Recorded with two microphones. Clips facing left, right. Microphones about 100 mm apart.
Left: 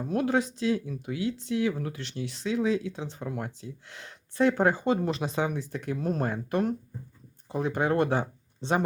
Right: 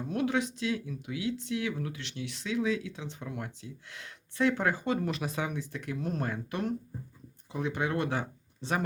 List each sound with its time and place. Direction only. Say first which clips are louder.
0.1 s speech: left 4 dB; 40° left (ahead or behind)
8.1 s speech: left 5 dB; 30° left (ahead or behind)